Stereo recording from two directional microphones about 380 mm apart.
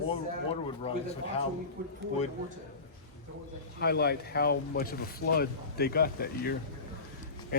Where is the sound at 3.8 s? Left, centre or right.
Left.